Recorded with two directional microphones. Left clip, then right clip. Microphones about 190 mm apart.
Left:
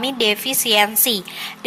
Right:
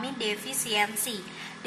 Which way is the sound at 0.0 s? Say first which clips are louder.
Left 12 dB; 40° left (ahead or behind).